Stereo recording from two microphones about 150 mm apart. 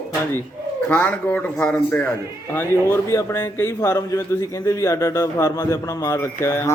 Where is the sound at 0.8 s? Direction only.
10° left (ahead or behind).